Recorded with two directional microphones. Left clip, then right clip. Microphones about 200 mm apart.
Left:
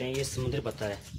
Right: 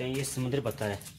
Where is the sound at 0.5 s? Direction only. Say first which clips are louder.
Right 4 dB; 45° right (ahead or behind).